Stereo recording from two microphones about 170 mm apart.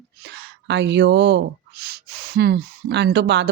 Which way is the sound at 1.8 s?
70° right (ahead or behind).